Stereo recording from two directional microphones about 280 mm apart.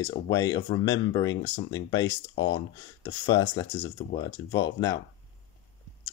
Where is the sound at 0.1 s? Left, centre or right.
Centre.